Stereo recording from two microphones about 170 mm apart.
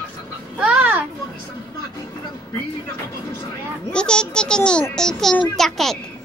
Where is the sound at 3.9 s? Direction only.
5° left (ahead or behind).